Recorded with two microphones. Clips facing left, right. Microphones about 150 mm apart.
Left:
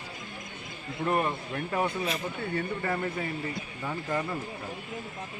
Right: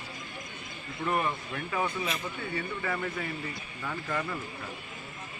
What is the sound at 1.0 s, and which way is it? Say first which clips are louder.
Speech: left 2 dB; 35° left (ahead or behind).